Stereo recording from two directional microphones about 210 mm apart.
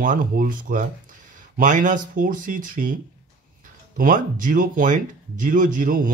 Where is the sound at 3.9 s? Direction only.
40° right (ahead or behind).